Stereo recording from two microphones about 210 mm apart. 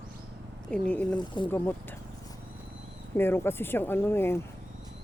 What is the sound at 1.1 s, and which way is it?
Speech, 25° left (ahead or behind).